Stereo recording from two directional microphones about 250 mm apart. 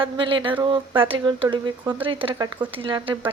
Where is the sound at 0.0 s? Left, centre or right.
Centre.